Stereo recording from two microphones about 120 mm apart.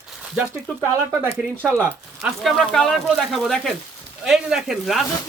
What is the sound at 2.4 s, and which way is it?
Speech, centre (ahead or behind).